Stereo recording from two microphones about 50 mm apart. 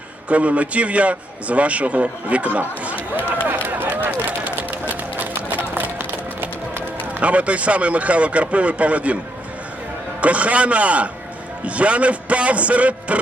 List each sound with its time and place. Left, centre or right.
0.3 s a man's voice: right
3.2 s run: right
5.7 s music: right
7.2 s a man's voice: right
10.2 s a man's voice: right